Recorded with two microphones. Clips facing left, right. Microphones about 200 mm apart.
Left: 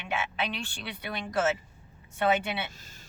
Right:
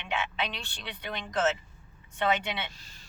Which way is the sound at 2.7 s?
50° left (ahead or behind).